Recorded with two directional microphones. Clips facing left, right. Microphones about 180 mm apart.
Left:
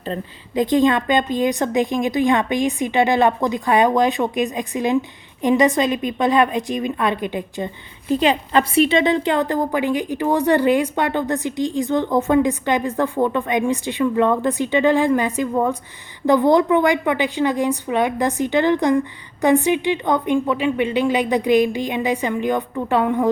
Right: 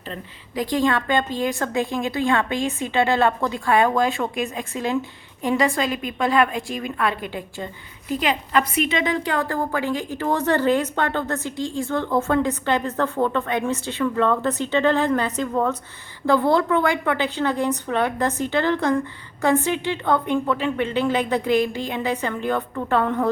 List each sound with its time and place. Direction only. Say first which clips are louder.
0.5 s a woman's voice: left 5 dB; 20° left (ahead or behind)